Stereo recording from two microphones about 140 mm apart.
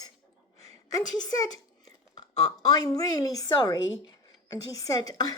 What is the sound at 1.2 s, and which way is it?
Speech, 25° left (ahead or behind).